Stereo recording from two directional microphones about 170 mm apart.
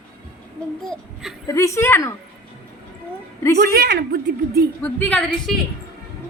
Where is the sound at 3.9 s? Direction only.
75° right (ahead or behind).